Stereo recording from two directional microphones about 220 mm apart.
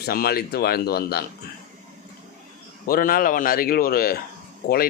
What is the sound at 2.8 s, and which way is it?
Speech, 40° left (ahead or behind).